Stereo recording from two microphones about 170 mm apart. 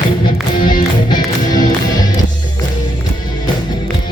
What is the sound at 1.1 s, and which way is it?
Music, 25° left (ahead or behind).